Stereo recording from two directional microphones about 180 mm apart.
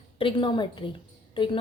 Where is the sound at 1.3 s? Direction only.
30° left (ahead or behind).